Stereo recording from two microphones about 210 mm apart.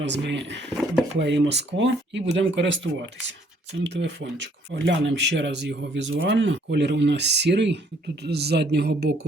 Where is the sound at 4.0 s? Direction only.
60° right (ahead or behind).